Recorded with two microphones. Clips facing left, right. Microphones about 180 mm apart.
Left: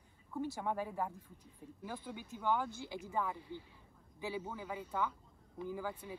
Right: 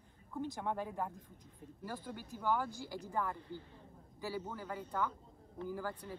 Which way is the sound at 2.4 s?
5° right (ahead or behind).